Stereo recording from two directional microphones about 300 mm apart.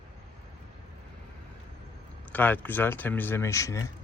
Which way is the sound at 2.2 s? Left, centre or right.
Centre.